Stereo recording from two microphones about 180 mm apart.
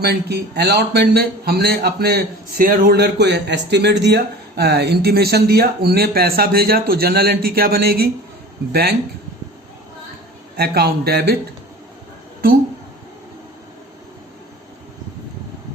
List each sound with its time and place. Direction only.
0.0 s a man's voice: 65° right (ahead or behind)
10.6 s a man's voice: 60° right (ahead or behind)